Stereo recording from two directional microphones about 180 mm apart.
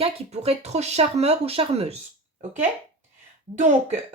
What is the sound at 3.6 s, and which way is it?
Speech, 45° right (ahead or behind).